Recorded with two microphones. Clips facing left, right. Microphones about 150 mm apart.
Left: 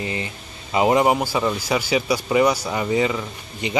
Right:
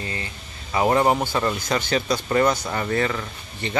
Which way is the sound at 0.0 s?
20° left (ahead or behind).